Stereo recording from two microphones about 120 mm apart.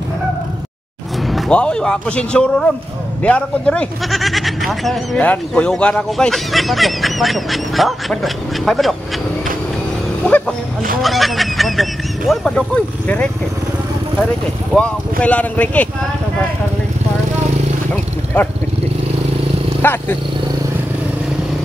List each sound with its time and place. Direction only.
1.5 s speech: 10° left (ahead or behind)
5.2 s speech: 10° left (ahead or behind)
10.2 s music: 10° left (ahead or behind)
11.0 s speech: centre (ahead or behind)
14.8 s speech: 10° left (ahead or behind)
19.8 s speech: 20° left (ahead or behind)